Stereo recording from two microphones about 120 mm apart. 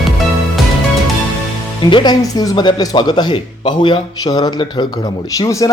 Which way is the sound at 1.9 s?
40° left (ahead or behind).